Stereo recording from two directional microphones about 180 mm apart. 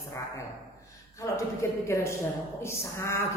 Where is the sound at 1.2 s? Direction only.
15° left (ahead or behind).